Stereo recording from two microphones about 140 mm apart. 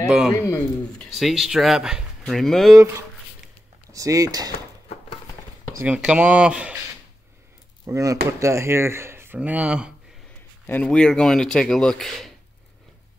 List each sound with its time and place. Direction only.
0.3 s speech: 20° left (ahead or behind)
0.9 s speech: centre (ahead or behind)
3.9 s speech: 25° right (ahead or behind)
5.8 s speech: 5° right (ahead or behind)
7.8 s speech: 25° right (ahead or behind); by 9.9 s 10° right (ahead or behind)
10.7 s speech: 5° left (ahead or behind)